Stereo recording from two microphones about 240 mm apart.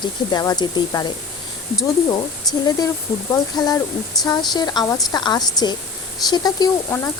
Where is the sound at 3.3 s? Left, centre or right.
Centre.